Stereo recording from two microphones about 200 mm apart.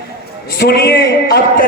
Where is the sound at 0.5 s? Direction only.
55° left (ahead or behind).